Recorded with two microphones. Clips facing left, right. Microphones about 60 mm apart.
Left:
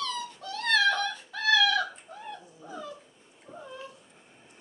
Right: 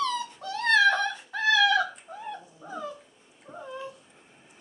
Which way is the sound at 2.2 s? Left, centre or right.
Right.